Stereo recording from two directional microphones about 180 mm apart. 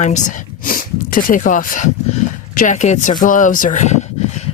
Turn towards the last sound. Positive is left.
turn(degrees=40)  # may be behind; listen again after turning